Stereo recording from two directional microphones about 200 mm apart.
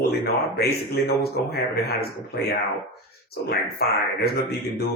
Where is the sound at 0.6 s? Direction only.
50° left (ahead or behind).